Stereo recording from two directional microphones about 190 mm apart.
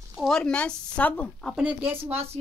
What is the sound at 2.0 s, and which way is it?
Speech, 35° right (ahead or behind).